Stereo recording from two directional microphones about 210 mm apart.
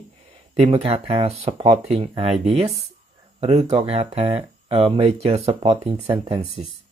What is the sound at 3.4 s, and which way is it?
Speech, 30° right (ahead or behind).